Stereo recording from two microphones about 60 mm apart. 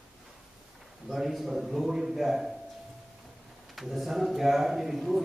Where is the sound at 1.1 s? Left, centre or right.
Centre.